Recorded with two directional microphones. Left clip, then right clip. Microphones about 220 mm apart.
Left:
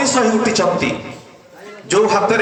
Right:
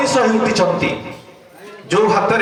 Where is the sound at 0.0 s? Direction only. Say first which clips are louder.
Right 1 dB; 50° left (ahead or behind).